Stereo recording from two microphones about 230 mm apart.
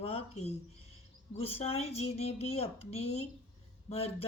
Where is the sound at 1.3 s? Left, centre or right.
Left.